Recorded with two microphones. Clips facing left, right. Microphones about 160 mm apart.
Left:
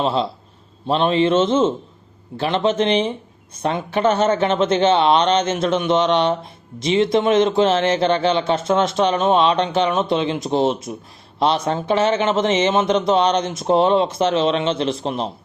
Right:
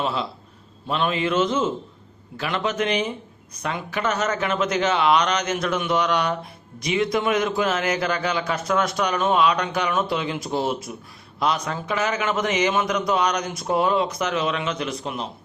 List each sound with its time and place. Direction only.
0.0 s a man's voice: 25° left (ahead or behind)